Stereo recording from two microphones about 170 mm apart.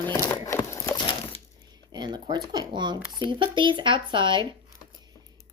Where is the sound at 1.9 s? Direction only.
25° right (ahead or behind).